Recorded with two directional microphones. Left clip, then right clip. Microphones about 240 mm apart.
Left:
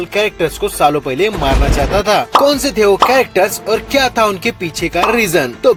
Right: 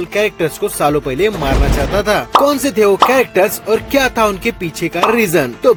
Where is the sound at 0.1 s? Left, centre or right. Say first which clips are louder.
Left 1 dB; right.